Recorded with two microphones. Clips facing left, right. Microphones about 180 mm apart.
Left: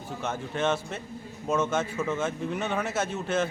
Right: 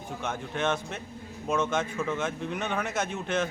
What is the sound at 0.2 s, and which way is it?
Speech, 5° left (ahead or behind).